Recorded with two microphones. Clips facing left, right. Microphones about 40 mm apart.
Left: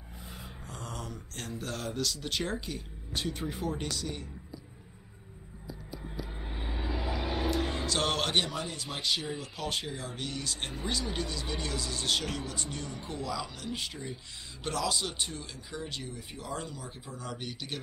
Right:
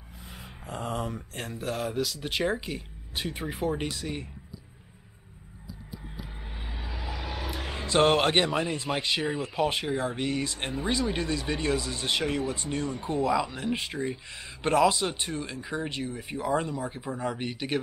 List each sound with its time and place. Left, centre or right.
0.7 s a sound: right
1.6 s speech: centre
6.5 s vehicle: centre
7.7 s speech: right